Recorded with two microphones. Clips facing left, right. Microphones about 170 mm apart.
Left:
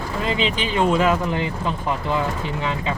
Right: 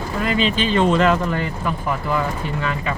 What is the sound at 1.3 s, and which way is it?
Speech, 20° left (ahead or behind).